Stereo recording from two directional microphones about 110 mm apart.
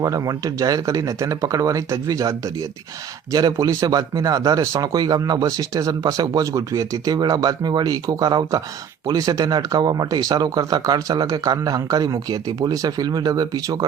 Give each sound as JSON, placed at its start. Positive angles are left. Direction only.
{"t": 0.0, "sound": "speech", "side_deg": -30}